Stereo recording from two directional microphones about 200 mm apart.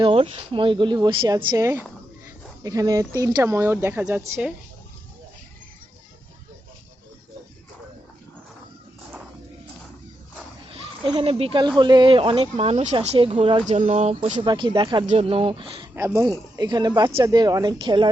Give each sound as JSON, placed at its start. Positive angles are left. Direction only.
{"t": 0.0, "sound": "speech", "side_deg": -30}
{"t": 10.7, "sound": "speech", "side_deg": -25}
{"t": 16.0, "sound": "speech", "side_deg": -15}